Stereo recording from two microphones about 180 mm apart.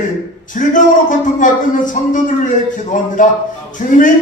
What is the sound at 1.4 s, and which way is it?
Speech, 45° left (ahead or behind).